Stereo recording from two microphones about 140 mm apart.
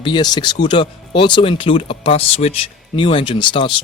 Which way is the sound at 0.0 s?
30° left (ahead or behind).